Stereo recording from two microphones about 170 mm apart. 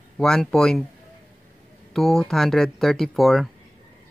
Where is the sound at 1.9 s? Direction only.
Centre (ahead or behind).